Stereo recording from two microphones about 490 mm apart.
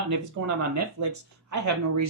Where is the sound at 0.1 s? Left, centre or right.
Right.